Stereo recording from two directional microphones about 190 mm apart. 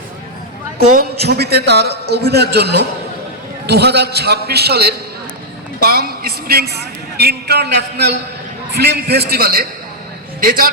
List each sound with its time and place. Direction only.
0.8 s a man's voice: 55° right (ahead or behind)